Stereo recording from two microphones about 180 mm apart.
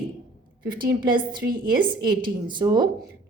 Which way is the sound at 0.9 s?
25° right (ahead or behind).